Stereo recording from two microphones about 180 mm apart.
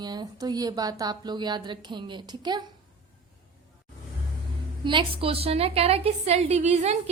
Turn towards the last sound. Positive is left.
turn(degrees=-35)  # may be behind; listen again after turning